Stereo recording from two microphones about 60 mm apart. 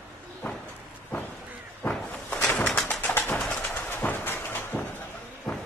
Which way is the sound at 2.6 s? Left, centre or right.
Centre.